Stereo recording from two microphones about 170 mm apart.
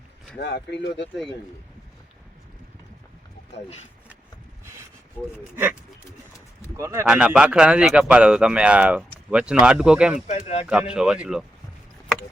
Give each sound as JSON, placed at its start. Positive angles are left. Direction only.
{"t": 0.3, "sound": "speech", "side_deg": 80}
{"t": 6.7, "sound": "speech", "side_deg": -20}
{"t": 7.1, "sound": "speech", "side_deg": -5}
{"t": 10.2, "sound": "speech", "side_deg": 40}
{"t": 10.7, "sound": "speech", "side_deg": -5}